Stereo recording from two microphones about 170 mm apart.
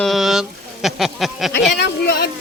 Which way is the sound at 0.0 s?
Centre (ahead or behind).